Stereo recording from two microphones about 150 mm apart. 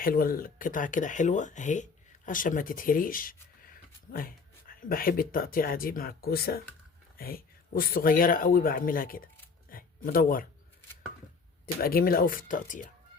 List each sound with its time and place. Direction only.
0.0 s speech: 75° left (ahead or behind)
4.7 s speech: 70° left (ahead or behind); by 6.6 s 90° left
7.2 s speech: 75° left (ahead or behind)
11.6 s speech: 80° left; by 12.9 s 60° left (ahead or behind)